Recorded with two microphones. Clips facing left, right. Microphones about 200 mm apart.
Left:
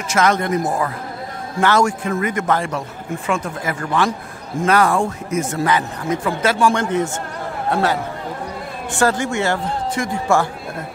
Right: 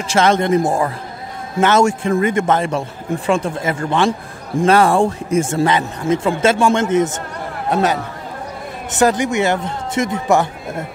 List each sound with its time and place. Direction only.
0.1 s speech: 25° right (ahead or behind)